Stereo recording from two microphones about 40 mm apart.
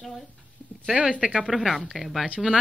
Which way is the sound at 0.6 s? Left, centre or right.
Left.